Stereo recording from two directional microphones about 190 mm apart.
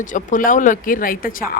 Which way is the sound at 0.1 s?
45° left (ahead or behind).